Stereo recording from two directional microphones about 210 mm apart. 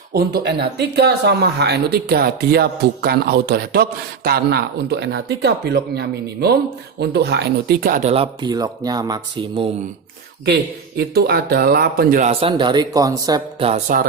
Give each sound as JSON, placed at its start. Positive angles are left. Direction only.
{"t": 0.1, "sound": "speech", "side_deg": -50}
{"t": 8.1, "sound": "speech", "side_deg": -25}
{"t": 10.4, "sound": "speech", "side_deg": -50}
{"t": 12.3, "sound": "speech", "side_deg": -25}